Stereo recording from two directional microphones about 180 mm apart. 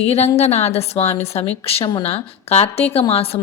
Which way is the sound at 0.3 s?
35° left (ahead or behind).